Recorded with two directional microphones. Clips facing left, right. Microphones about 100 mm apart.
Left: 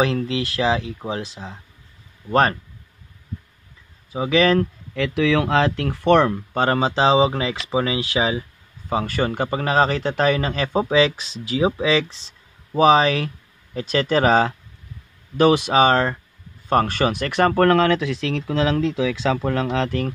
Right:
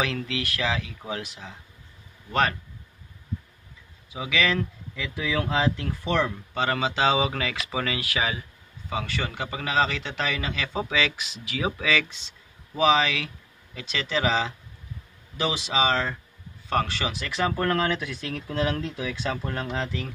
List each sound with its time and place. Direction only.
0.0 s speech: 30° left (ahead or behind)
4.1 s a man's voice: 40° left (ahead or behind)
4.9 s speech: 75° left (ahead or behind)
6.5 s speech: 40° left (ahead or behind); by 8.5 s 25° left (ahead or behind)
8.8 s a man's voice: 45° left (ahead or behind); by 20.1 s 65° left (ahead or behind)